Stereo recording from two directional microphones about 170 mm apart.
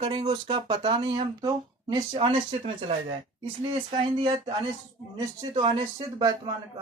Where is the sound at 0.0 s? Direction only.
35° right (ahead or behind).